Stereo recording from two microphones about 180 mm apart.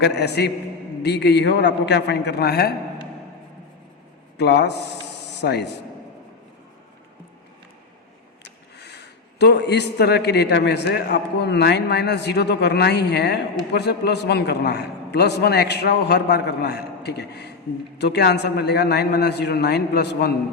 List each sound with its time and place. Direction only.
0.0 s a man's voice: 70° left (ahead or behind)
4.4 s speech: 70° left (ahead or behind)
8.8 s a man's voice: 70° left (ahead or behind)